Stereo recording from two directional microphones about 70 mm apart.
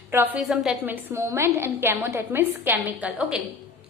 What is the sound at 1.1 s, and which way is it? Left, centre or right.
A woman's voice, right.